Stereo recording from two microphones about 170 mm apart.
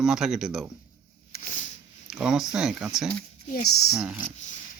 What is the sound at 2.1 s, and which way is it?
Speech, 5° right (ahead or behind).